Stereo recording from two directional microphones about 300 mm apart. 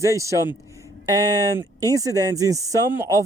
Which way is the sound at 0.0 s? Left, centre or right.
Centre.